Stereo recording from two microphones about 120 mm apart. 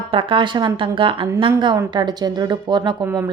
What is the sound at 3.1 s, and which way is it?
Speech, 25° right (ahead or behind).